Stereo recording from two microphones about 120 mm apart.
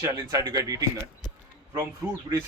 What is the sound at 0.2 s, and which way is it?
Speech, 30° right (ahead or behind).